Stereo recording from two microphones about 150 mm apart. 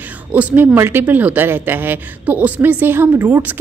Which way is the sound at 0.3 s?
10° right (ahead or behind).